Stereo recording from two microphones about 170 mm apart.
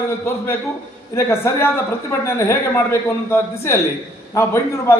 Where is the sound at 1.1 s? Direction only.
15° left (ahead or behind).